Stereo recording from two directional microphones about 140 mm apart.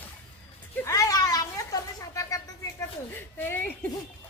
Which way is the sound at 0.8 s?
25° left (ahead or behind).